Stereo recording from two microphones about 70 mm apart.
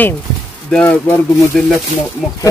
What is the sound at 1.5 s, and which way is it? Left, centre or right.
Speech, centre.